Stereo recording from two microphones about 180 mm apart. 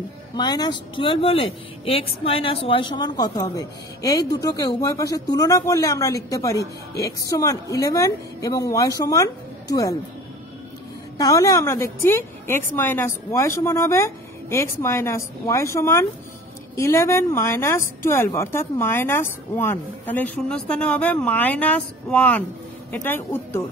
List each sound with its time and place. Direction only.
0.4 s speech: 25° left (ahead or behind)
11.1 s speech: 20° left (ahead or behind)